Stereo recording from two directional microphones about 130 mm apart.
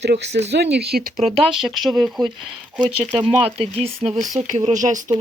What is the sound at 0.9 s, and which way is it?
Speech, 90° right.